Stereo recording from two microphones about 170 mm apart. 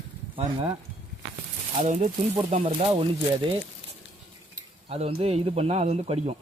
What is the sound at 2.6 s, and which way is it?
Speech, 30° right (ahead or behind).